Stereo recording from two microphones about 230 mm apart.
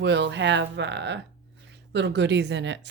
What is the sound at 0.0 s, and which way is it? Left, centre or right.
A woman's voice, right.